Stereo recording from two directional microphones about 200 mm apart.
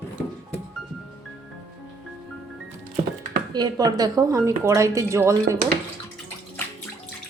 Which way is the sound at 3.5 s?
20° right (ahead or behind).